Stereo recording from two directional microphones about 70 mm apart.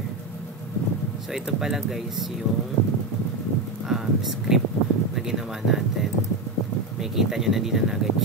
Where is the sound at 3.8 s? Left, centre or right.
Centre.